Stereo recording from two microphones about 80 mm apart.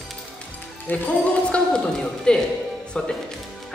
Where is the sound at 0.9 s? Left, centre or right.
Left.